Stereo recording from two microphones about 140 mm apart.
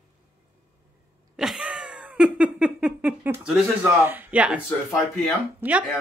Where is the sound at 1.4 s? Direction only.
5° right (ahead or behind).